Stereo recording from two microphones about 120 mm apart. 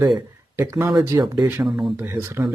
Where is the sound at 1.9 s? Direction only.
20° right (ahead or behind).